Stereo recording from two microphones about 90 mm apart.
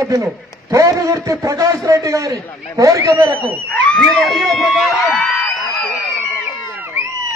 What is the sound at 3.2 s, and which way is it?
Speech, 20° right (ahead or behind).